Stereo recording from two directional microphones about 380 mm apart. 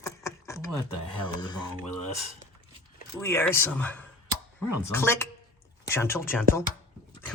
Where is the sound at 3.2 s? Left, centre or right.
Centre.